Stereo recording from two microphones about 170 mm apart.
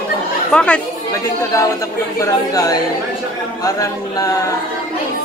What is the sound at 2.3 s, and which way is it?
Speech, 20° left (ahead or behind).